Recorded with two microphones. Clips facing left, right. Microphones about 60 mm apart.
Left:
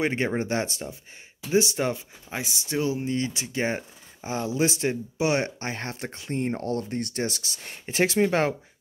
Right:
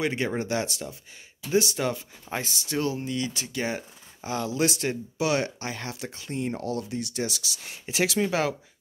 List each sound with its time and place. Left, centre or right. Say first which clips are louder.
0.0 s speech: left 2 dB; left; by 3.1 s centre
3.1 s speech: left 2 dB; left